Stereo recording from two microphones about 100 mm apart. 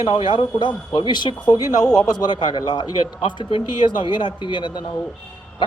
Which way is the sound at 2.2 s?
50° left (ahead or behind).